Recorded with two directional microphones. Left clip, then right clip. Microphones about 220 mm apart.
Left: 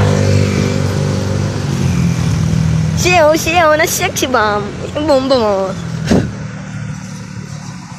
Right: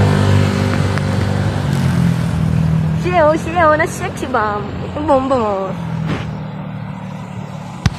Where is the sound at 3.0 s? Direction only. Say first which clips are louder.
Left 4 dB; 25° left (ahead or behind).